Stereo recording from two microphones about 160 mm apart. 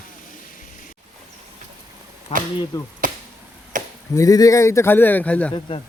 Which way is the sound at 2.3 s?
40° left (ahead or behind).